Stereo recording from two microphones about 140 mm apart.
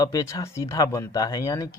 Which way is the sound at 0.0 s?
25° left (ahead or behind).